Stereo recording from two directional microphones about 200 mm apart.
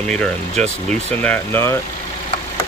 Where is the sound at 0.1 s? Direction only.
5° left (ahead or behind).